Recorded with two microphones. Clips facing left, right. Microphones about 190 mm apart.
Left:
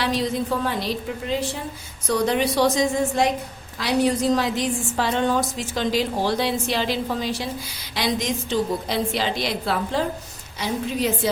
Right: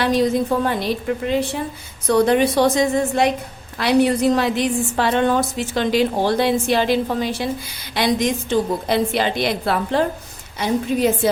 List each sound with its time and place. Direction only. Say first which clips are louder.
0.0 s a woman's voice: right 6 dB; 50° right (ahead or behind)
2.0 s a woman's voice: right 6 dB; 55° right (ahead or behind)